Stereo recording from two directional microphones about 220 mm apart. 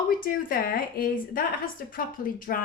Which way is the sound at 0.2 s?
40° left (ahead or behind).